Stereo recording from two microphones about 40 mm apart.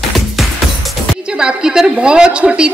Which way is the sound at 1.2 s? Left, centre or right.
Right.